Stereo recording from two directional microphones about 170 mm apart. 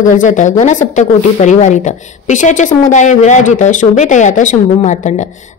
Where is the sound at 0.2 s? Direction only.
45° left (ahead or behind).